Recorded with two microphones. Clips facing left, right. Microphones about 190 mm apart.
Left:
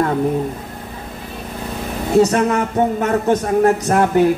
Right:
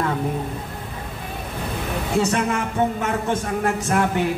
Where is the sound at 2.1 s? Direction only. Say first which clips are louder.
Left 8 dB; 40° left (ahead or behind).